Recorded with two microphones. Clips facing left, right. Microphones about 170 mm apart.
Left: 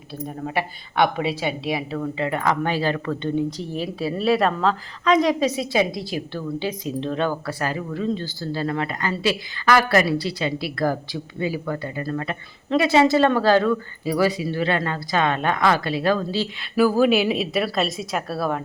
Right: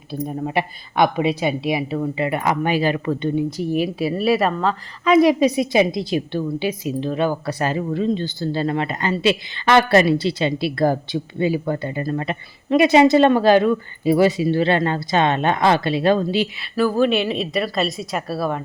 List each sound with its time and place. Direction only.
0.4 s a woman's voice: 15° right (ahead or behind)
7.4 s speech: 25° right (ahead or behind)
16.7 s speech: 5° left (ahead or behind)